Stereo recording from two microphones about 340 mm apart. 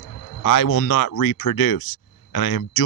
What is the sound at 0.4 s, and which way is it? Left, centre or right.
Speech, left.